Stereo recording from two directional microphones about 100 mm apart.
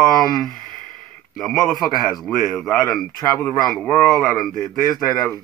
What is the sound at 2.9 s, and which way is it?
A man's voice, 15° left (ahead or behind).